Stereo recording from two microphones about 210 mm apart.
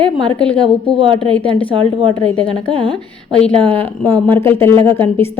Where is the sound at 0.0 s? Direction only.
25° right (ahead or behind).